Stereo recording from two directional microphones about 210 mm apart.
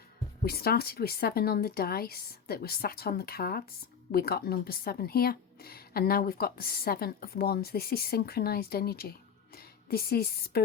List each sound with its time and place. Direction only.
0.4 s a woman's voice: 45° left (ahead or behind)